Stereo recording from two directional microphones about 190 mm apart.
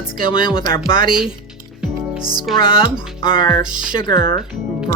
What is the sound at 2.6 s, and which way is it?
Speech, 25° left (ahead or behind).